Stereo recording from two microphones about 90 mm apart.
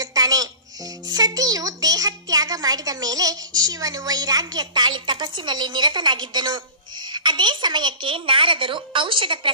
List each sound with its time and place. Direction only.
0.0 s a child's voice: 45° right (ahead or behind); by 9.5 s 70° right (ahead or behind)